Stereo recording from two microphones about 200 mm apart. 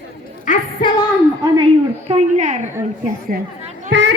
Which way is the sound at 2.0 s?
35° right (ahead or behind).